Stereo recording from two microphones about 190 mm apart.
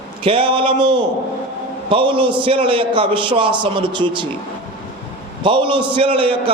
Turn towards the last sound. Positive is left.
turn(degrees=-25)  # may be behind; listen again after turning